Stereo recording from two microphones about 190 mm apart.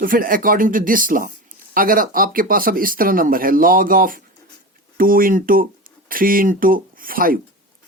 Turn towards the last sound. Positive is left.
turn(degrees=-50)  # may be behind; listen again after turning